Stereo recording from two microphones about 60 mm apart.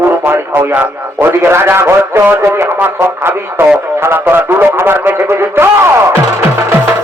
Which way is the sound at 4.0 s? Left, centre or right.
Right.